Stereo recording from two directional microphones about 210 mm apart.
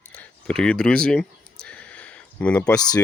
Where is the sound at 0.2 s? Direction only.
5° left (ahead or behind).